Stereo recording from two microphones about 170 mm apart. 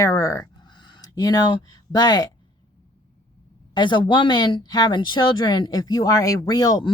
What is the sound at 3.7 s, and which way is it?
Speech, 25° left (ahead or behind).